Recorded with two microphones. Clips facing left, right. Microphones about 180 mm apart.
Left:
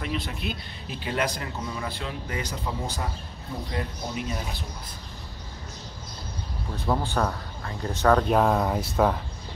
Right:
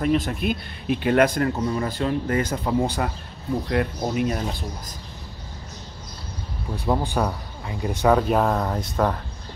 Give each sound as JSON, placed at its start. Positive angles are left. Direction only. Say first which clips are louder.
{"t": 0.0, "sound": "speech", "louder": "right 9 dB", "side_deg": -45}
{"t": 6.7, "sound": "speech", "louder": "right 3 dB", "side_deg": -15}